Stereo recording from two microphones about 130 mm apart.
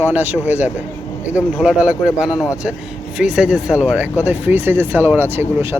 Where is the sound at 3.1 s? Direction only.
5° right (ahead or behind).